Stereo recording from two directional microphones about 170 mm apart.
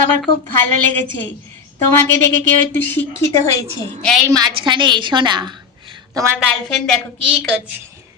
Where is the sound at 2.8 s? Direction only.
10° left (ahead or behind).